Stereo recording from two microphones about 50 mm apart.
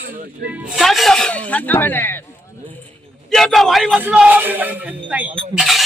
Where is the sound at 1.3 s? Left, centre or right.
Left.